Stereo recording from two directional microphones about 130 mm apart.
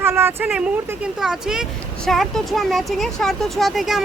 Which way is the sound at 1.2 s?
5° right (ahead or behind).